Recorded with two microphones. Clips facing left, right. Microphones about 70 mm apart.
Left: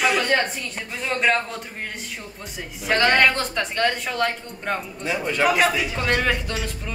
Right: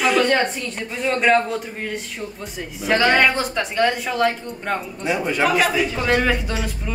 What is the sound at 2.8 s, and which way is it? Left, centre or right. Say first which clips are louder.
A woman's voice: right 2 dB; centre.